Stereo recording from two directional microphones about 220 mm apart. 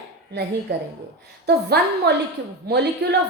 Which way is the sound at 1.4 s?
45° right (ahead or behind).